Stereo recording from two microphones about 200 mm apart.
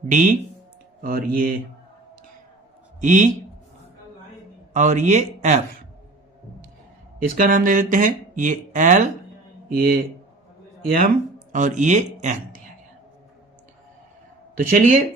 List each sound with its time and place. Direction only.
0.1 s speech: 40° right (ahead or behind)
3.0 s speech: 40° right (ahead or behind)
4.7 s a man's voice: 35° right (ahead or behind)
7.2 s speech: 45° right (ahead or behind)
11.5 s speech: 40° right (ahead or behind)
14.5 s speech: 45° right (ahead or behind)